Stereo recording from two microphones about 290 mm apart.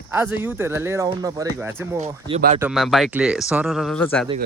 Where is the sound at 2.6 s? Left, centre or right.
Centre.